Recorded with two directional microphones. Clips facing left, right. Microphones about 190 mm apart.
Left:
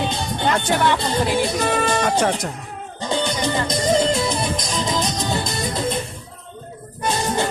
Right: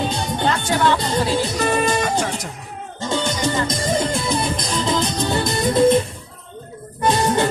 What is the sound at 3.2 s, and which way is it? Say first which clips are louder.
Music: right 1 dB; 50° right (ahead or behind).